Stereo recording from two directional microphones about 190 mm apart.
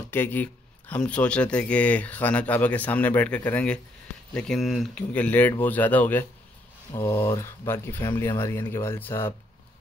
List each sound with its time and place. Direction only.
0.1 s a man's voice: 10° left (ahead or behind)